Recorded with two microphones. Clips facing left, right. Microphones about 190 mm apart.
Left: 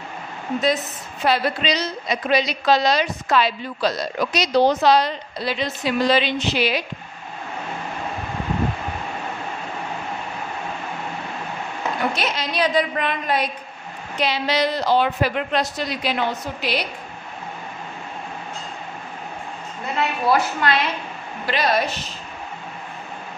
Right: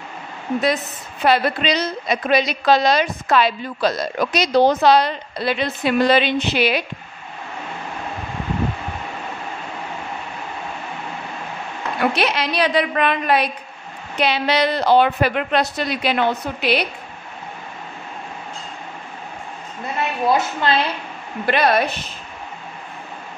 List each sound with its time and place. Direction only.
1.2 s a woman's voice: 60° right (ahead or behind)
12.0 s a woman's voice: 65° right (ahead or behind)
20.2 s a woman's voice: 25° right (ahead or behind)
21.5 s a woman's voice: 60° right (ahead or behind)